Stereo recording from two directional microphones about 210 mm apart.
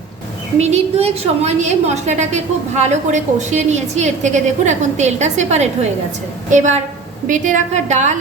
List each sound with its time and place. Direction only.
0.6 s a woman's voice: 30° right (ahead or behind)